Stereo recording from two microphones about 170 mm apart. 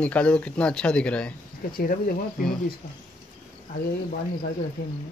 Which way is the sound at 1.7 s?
60° left (ahead or behind).